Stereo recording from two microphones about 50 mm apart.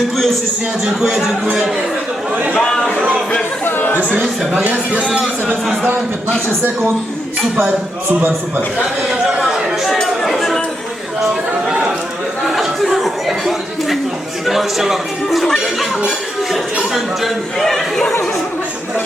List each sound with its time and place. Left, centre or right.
2.3 s speech: right
2.6 s speech: centre
3.6 s chatter: left
4.9 s speech: right
9.4 s chatter: centre
10.2 s chink: centre
12.5 s chatter: centre
14.4 s a man's voice: centre
16.9 s a man's voice: centre